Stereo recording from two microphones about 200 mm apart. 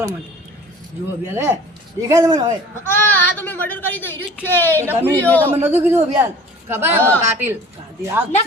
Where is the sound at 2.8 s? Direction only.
10° left (ahead or behind).